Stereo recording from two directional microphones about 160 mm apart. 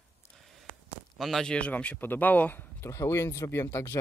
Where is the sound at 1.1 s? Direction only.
Centre (ahead or behind).